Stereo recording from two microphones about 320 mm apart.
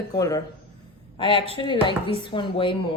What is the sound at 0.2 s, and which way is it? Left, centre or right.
A woman's voice, centre.